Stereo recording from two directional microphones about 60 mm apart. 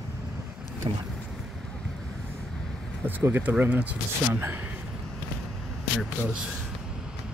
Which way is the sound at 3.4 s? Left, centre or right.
Right.